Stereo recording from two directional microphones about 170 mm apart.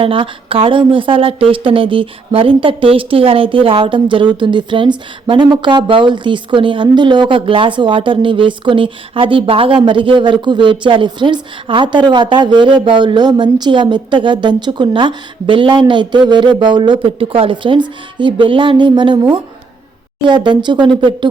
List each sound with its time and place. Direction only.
0.0 s a woman's voice: 30° right (ahead or behind)